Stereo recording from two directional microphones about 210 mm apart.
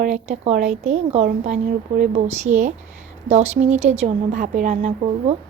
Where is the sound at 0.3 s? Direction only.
30° right (ahead or behind).